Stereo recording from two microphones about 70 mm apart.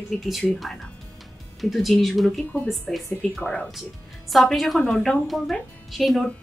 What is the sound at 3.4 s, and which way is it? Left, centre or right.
Speech, centre.